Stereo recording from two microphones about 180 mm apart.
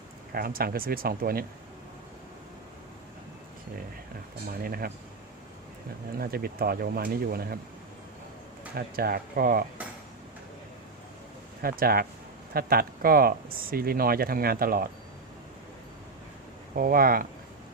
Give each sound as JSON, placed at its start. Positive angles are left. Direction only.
{"t": 0.3, "sound": "speech", "side_deg": -55}
{"t": 4.6, "sound": "speech", "side_deg": -55}
{"t": 6.1, "sound": "speech", "side_deg": -55}
{"t": 8.7, "sound": "speech", "side_deg": -55}
{"t": 11.6, "sound": "speech", "side_deg": -55}
{"t": 16.7, "sound": "speech", "side_deg": -55}